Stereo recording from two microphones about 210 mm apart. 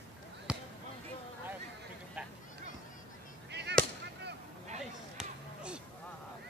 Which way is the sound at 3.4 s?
55° right (ahead or behind).